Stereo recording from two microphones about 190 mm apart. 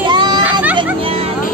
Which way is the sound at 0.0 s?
25° right (ahead or behind).